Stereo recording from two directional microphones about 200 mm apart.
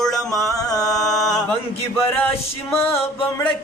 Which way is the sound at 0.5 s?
20° left (ahead or behind).